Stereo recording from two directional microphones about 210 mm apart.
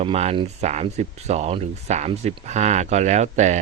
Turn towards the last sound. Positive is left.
turn(degrees=-35)  # may be behind; listen again after turning